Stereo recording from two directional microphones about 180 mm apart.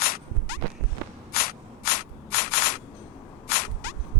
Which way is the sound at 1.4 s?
60° left (ahead or behind).